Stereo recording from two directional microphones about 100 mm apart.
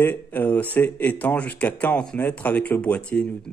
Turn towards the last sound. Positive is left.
turn(degrees=15)  # may be behind; listen again after turning